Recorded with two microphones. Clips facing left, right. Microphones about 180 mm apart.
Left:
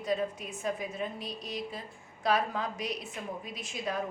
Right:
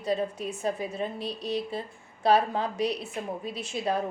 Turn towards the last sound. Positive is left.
turn(degrees=-30)  # may be behind; listen again after turning